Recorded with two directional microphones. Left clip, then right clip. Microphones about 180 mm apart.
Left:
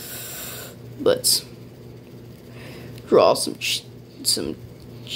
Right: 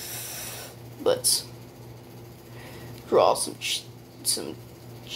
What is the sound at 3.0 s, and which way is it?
Speech, 60° left (ahead or behind).